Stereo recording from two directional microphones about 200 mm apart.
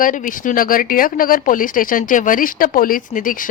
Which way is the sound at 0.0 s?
40° left (ahead or behind).